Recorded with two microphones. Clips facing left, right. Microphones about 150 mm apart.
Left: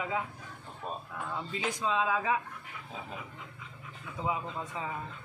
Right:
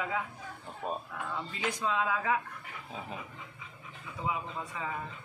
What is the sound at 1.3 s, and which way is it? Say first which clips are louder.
Speech: left 1 dB; 20° left (ahead or behind).